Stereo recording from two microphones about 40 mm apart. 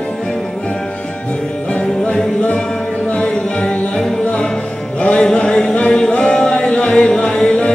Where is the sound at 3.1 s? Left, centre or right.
Left.